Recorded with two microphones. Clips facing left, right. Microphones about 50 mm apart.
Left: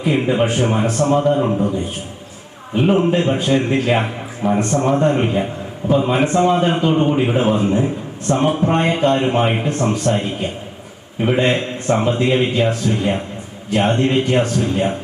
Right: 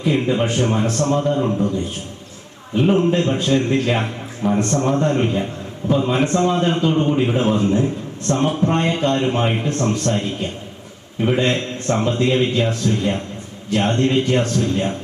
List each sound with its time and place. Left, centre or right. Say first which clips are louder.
0.0 s a man's voice: left 2 dB; centre